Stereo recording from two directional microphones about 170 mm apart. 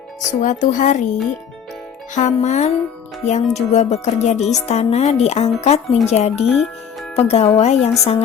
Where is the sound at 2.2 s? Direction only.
45° left (ahead or behind).